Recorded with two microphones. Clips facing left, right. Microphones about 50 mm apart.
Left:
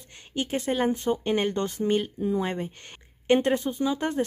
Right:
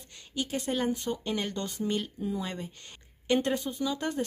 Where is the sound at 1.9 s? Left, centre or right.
Left.